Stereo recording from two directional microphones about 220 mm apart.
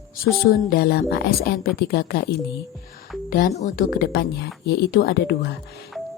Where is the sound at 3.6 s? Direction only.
40° left (ahead or behind).